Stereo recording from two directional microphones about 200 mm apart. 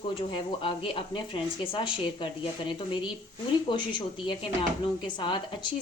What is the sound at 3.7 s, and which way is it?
Speech, 25° left (ahead or behind).